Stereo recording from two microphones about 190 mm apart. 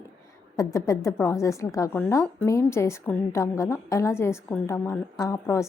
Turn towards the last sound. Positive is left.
turn(degrees=15)  # may be behind; listen again after turning